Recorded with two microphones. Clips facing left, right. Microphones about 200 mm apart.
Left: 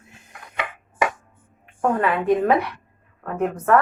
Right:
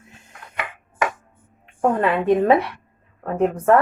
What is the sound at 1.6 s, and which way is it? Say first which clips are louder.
A woman's voice: right 2 dB; 25° right (ahead or behind).